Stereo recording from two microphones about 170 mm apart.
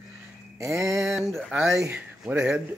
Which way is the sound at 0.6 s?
15° right (ahead or behind).